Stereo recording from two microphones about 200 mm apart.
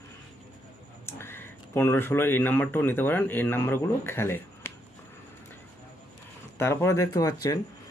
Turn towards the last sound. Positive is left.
turn(degrees=15)  # may be behind; listen again after turning